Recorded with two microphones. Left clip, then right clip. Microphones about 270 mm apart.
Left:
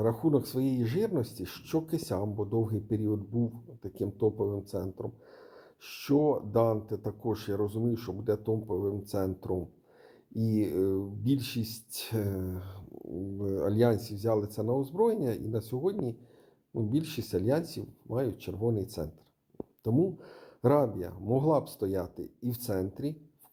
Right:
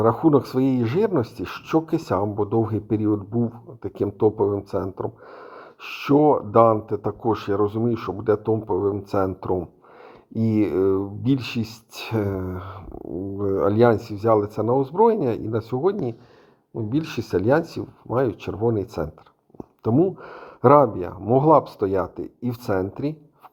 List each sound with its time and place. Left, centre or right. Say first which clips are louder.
0.0 s speech: right 10 dB; centre